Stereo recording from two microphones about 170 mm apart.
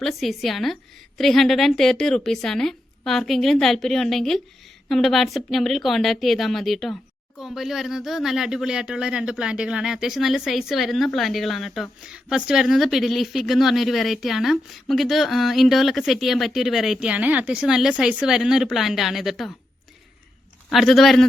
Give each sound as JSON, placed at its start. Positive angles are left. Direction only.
{"t": 0.0, "sound": "speech", "side_deg": 0}
{"t": 20.7, "sound": "speech", "side_deg": 0}